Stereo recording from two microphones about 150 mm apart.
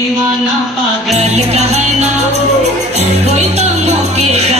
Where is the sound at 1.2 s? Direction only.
45° right (ahead or behind).